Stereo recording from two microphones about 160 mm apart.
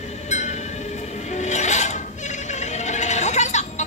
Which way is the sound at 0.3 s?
45° left (ahead or behind).